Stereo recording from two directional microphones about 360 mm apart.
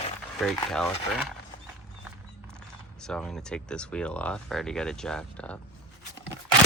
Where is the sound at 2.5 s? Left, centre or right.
Centre.